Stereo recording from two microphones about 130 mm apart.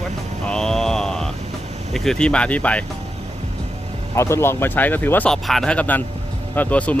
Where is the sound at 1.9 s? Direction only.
Centre (ahead or behind).